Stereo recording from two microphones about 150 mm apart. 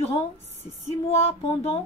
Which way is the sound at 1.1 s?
40° left (ahead or behind).